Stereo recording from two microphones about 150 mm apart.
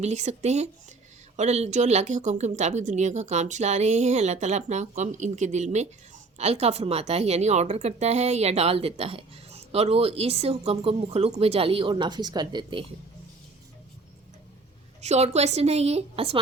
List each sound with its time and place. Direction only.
0.0 s a woman's voice: 50° right (ahead or behind); by 12.8 s 30° right (ahead or behind)
15.0 s a woman's voice: 45° right (ahead or behind)